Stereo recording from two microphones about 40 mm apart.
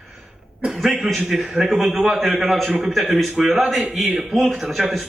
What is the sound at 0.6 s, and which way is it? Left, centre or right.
A man's voice, centre.